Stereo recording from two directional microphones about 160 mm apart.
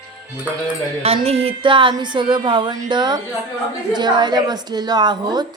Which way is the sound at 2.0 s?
30° right (ahead or behind).